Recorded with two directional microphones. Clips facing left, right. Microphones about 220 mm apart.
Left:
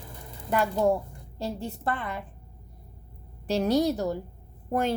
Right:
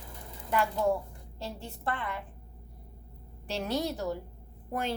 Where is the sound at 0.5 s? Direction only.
40° left (ahead or behind).